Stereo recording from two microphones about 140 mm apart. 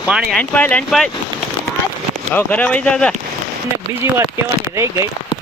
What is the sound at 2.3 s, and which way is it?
Speech, 10° left (ahead or behind).